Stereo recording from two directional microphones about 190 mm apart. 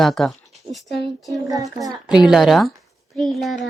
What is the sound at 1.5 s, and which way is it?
Speech, 20° right (ahead or behind).